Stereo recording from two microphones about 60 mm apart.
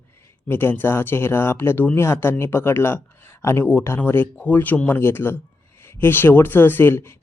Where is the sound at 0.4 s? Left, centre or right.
Left.